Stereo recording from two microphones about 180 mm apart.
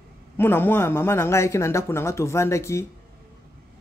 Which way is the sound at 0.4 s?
10° left (ahead or behind).